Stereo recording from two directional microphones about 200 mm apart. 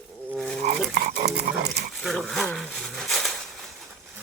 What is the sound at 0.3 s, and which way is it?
Dog, 5° left (ahead or behind).